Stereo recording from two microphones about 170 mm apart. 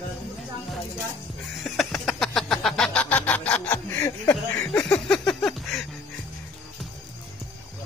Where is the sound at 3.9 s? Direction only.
20° left (ahead or behind).